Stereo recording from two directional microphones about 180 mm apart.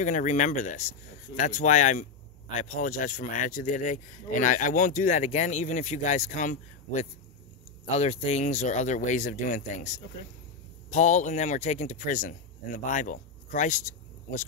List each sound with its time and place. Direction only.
0.0 s speech: 40° left (ahead or behind)